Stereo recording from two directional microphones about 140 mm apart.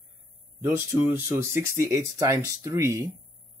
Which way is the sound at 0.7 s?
15° right (ahead or behind).